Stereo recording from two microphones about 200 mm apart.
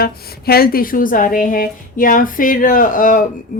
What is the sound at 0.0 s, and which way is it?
A woman's voice, 50° left (ahead or behind).